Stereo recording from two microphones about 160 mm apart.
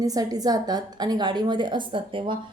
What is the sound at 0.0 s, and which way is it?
A woman's voice, 20° right (ahead or behind).